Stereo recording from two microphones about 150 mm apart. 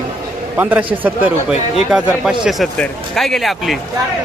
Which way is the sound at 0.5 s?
10° right (ahead or behind).